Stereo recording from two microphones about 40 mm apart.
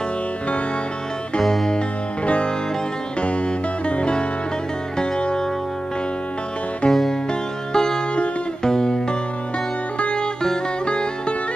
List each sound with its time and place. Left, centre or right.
1.4 s music: centre
2.2 s music: left
3.8 s music: left
6.9 s music: centre
7.7 s music: centre
9.9 s music: left